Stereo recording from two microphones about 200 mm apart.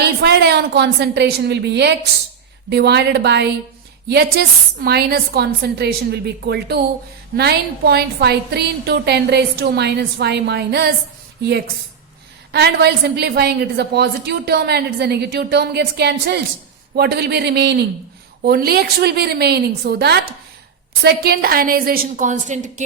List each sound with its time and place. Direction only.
0.2 s a woman's voice: 55° right (ahead or behind)
12.5 s a woman's voice: 55° right (ahead or behind); by 22.8 s 35° right (ahead or behind)